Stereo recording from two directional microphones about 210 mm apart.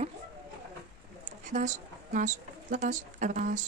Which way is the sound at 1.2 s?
35° right (ahead or behind).